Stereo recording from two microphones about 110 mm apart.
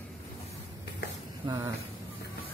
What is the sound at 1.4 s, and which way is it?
Speech, 40° right (ahead or behind).